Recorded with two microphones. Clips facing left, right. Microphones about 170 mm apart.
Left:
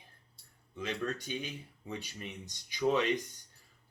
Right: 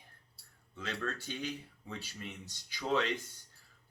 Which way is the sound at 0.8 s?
15° left (ahead or behind).